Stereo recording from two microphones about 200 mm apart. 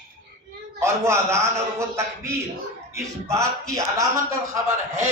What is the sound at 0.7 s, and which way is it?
A man's voice, 15° right (ahead or behind).